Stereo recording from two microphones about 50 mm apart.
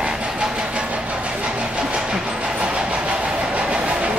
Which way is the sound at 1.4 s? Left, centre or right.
Right.